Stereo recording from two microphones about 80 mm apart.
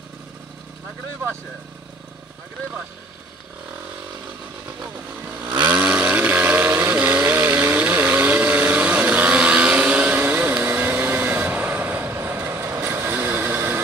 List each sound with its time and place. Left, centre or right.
4.8 s motorcycle: right
5.7 s vehicle: centre